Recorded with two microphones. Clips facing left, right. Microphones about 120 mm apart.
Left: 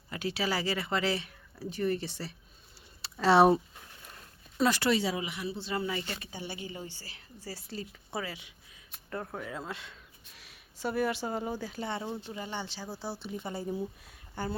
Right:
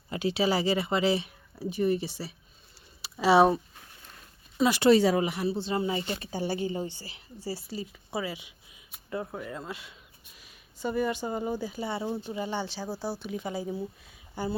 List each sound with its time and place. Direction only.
0.1 s speech: 20° right (ahead or behind)
3.0 s a sound: 5° right (ahead or behind)
4.9 s speech: 45° right (ahead or behind); by 6.2 s 25° right (ahead or behind)
6.3 s speech: 40° right (ahead or behind)
6.8 s speech: 20° right (ahead or behind); by 14.2 s centre (ahead or behind)